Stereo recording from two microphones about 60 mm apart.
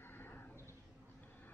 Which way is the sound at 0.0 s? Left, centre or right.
Left.